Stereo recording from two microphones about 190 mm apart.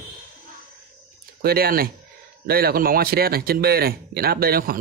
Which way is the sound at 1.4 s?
50° right (ahead or behind).